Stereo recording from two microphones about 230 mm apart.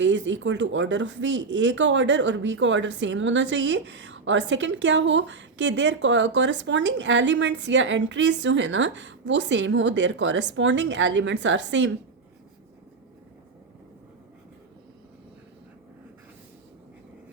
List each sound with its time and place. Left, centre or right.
0.0 s speech: right